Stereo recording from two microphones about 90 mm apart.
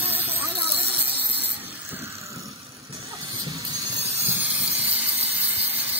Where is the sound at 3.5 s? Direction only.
35° right (ahead or behind).